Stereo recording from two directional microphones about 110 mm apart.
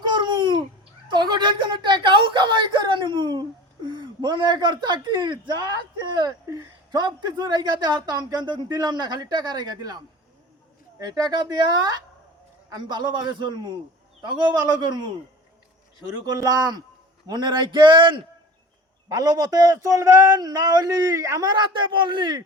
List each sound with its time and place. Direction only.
0.0 s babbling: 40° right (ahead or behind)
1.1 s a sound: 45° right (ahead or behind)
3.8 s speech: 40° right (ahead or behind)
11.0 s a man's voice: 35° right (ahead or behind)
16.2 s speech: 35° right (ahead or behind)
19.0 s speech: 35° right (ahead or behind)